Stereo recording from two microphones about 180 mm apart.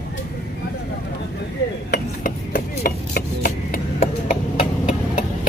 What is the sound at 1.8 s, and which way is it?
Rub, 55° left (ahead or behind).